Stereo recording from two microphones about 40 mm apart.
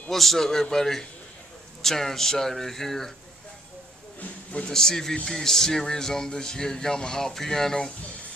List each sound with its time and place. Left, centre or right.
0.1 s speech: centre
4.2 s a sound: left
4.6 s speech: centre